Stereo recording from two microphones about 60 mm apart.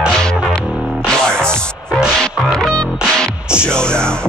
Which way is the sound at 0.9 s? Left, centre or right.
Centre.